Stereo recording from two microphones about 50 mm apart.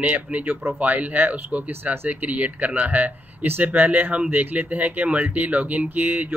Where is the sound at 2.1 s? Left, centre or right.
Right.